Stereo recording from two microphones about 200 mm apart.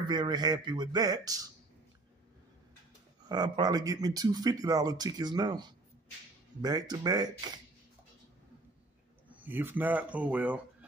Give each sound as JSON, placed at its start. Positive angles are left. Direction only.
{"t": 0.0, "sound": "speech", "side_deg": -20}
{"t": 3.3, "sound": "speech", "side_deg": -20}
{"t": 9.3, "sound": "speech", "side_deg": -10}